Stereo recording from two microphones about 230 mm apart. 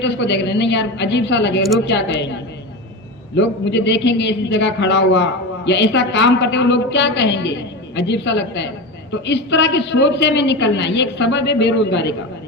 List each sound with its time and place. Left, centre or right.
0.0 s a man's voice: left
3.3 s a man's voice: left